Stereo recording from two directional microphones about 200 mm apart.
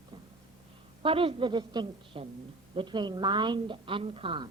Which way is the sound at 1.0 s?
25° right (ahead or behind).